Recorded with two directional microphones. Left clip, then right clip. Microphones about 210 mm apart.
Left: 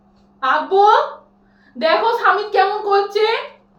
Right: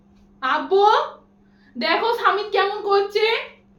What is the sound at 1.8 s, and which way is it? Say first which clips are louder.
A woman's voice: left 5 dB; 35° right (ahead or behind).